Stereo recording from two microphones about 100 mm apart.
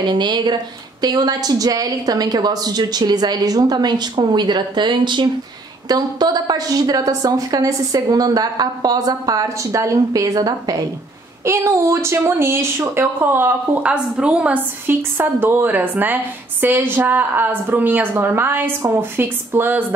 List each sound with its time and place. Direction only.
0.0 s a woman's voice: 45° right (ahead or behind)
11.4 s speech: 25° right (ahead or behind)